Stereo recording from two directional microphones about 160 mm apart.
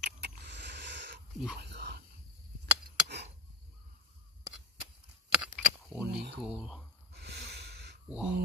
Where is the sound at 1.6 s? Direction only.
90° right.